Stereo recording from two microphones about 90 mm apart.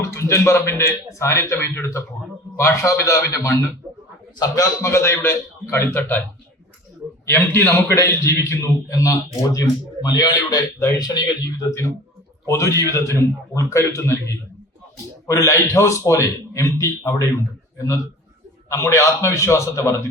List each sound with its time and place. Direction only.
0.0 s a man's voice: 30° left (ahead or behind)
7.3 s a man's voice: 25° left (ahead or behind); by 11.3 s 45° left (ahead or behind)
12.5 s a man's voice: 35° left (ahead or behind)